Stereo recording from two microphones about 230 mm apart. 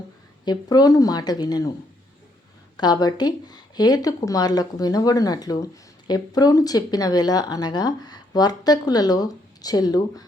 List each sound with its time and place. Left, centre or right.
0.4 s speech: centre
2.7 s speech: centre